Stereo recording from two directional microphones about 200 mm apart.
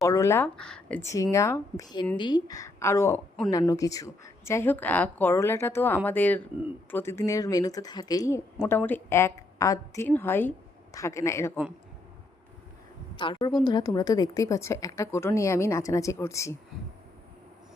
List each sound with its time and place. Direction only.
0.0 s speech: 15° left (ahead or behind)
13.1 s a woman's voice: 25° left (ahead or behind)